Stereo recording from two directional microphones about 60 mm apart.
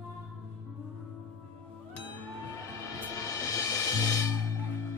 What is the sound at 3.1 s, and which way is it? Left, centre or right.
Music, left.